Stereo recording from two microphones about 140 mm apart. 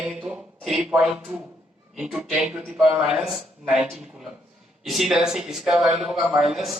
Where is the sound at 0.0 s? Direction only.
10° right (ahead or behind).